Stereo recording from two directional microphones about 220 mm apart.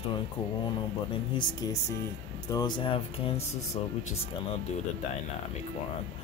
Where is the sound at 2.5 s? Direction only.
20° left (ahead or behind).